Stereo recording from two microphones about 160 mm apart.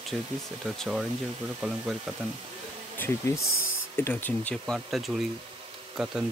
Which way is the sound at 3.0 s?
15° left (ahead or behind).